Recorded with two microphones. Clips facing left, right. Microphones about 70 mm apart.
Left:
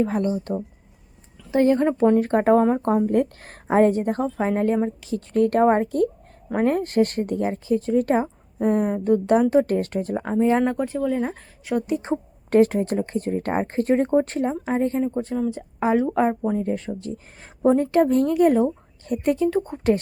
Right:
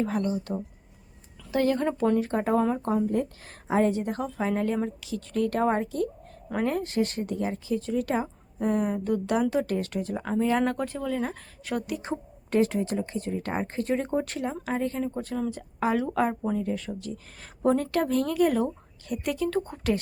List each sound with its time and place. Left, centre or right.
0.0 s a woman's voice: left
2.1 s speech: left
6.5 s speech: left
10.6 s speech: centre
12.5 s speech: left; by 16.6 s centre
16.6 s speech: left
17.6 s speech: left
19.5 s speech: centre